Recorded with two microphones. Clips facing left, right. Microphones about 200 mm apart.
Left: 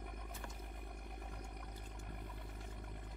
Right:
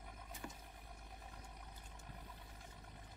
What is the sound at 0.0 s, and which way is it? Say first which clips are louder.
Vehicle: left 2 dB; 60° left (ahead or behind).